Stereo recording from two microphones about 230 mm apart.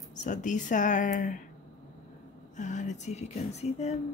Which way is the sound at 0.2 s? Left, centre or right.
Left.